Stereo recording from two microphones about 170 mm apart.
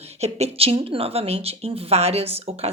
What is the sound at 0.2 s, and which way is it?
Speech, 40° right (ahead or behind).